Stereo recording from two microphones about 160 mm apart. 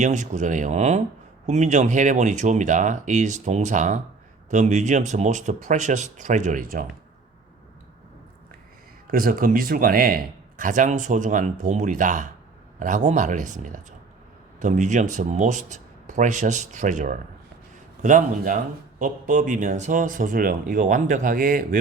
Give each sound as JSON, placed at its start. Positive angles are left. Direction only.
{"t": 0.0, "sound": "speech", "side_deg": -50}
{"t": 9.0, "sound": "speech", "side_deg": -65}